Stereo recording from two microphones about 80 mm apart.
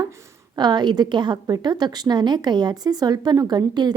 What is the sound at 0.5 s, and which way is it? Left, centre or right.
A woman's voice, right.